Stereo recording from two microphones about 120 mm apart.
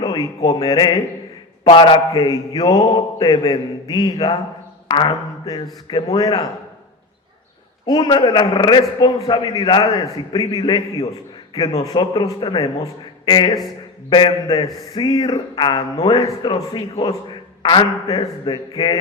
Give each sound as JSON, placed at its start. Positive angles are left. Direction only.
{"t": 0.0, "sound": "a man's voice", "side_deg": 30}
{"t": 7.9, "sound": "a man's voice", "side_deg": 40}